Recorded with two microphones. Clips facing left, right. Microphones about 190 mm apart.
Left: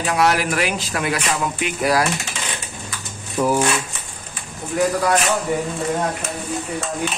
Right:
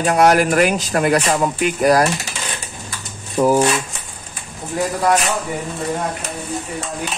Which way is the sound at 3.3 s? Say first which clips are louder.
Right 4 dB; 40° right (ahead or behind).